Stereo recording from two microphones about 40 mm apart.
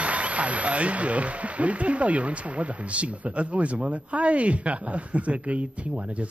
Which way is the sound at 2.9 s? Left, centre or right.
Right.